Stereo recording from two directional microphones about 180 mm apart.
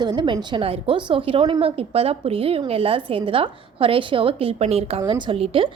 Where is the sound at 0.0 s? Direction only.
25° right (ahead or behind).